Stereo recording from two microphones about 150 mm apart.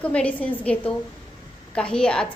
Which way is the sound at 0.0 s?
10° left (ahead or behind).